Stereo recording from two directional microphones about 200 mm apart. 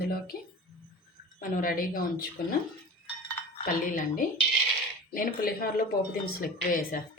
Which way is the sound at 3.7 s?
40° left (ahead or behind).